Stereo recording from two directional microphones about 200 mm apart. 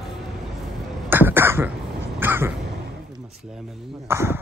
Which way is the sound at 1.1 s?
10° right (ahead or behind).